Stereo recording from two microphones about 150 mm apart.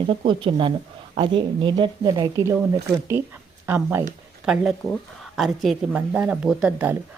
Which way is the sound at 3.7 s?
15° right (ahead or behind).